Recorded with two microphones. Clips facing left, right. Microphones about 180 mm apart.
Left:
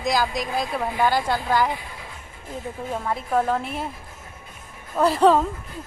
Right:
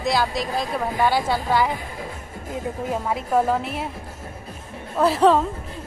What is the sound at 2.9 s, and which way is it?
A woman's voice, 5° right (ahead or behind).